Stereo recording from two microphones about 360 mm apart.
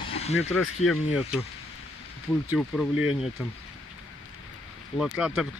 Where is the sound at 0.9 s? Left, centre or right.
Centre.